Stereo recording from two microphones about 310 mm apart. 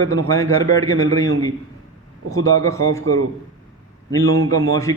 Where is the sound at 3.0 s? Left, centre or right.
Right.